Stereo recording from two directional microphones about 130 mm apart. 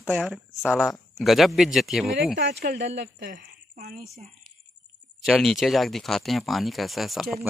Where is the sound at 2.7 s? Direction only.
80° right.